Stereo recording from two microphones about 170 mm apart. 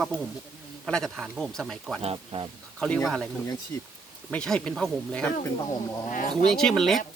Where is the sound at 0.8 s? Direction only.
5° left (ahead or behind).